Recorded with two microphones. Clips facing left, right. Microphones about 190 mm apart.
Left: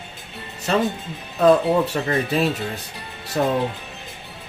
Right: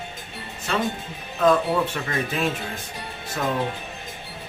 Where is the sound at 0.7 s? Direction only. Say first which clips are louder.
Left 5 dB; 35° left (ahead or behind).